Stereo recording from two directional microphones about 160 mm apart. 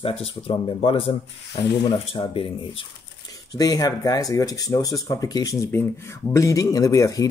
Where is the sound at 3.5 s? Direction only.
25° left (ahead or behind).